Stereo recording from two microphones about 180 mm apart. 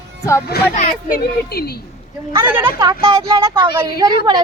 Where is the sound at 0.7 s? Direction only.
45° left (ahead or behind).